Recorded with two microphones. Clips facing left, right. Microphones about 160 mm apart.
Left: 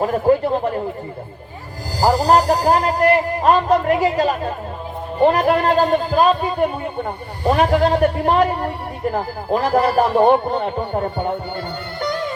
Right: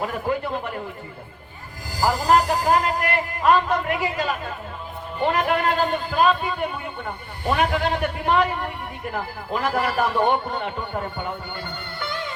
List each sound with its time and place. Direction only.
0.0 s speech: 40° left (ahead or behind)
2.0 s speech: 40° left (ahead or behind)
11.9 s music: 40° left (ahead or behind)